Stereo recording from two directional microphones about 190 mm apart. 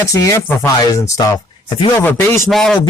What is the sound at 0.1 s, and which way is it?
Speech, 15° left (ahead or behind).